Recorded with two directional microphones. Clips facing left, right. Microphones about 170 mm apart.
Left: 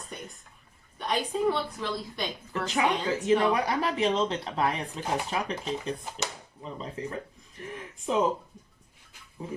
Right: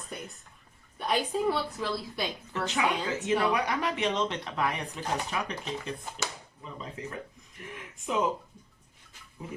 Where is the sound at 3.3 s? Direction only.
30° left (ahead or behind).